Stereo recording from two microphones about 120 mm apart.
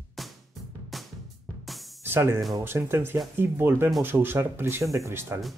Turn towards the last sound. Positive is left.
turn(degrees=-20)  # may be behind; listen again after turning